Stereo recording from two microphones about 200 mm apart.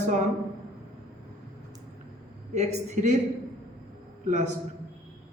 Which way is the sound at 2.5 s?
35° right (ahead or behind).